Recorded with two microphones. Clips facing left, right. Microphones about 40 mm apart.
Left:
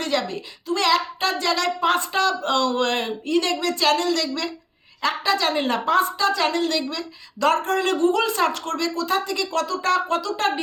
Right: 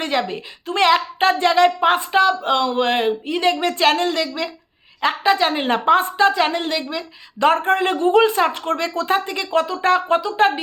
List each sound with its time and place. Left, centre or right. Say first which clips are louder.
0.0 s a woman's voice: right 3 dB; right